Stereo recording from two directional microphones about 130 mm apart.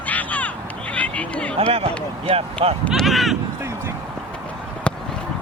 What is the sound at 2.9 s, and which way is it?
Speech, centre (ahead or behind).